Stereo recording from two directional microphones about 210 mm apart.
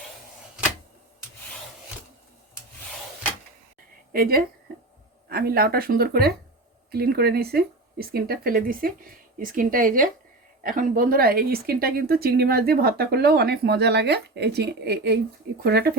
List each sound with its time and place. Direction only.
4.1 s a woman's voice: 45° right (ahead or behind)